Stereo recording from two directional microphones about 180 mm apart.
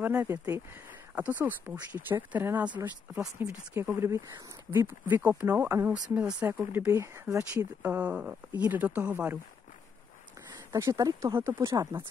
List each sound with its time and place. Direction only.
0.0 s speech: 10° right (ahead or behind)
10.7 s speech: 20° right (ahead or behind)